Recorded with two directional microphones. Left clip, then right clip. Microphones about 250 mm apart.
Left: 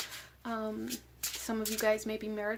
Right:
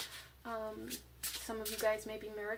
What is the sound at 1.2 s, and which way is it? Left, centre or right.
Speech, left.